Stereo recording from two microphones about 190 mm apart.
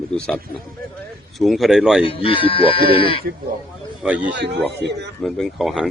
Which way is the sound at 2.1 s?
30° left (ahead or behind).